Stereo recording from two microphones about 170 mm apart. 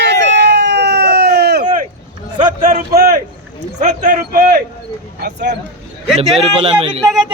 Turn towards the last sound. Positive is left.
turn(degrees=0)  # may be behind; listen again after turning